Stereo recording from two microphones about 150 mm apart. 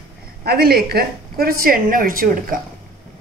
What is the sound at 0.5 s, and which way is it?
A woman's voice, 90° right.